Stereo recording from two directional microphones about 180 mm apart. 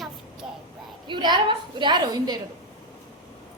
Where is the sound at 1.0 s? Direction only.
25° right (ahead or behind).